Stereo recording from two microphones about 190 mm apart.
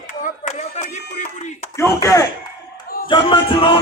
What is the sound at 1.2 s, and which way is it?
Speech, 40° left (ahead or behind).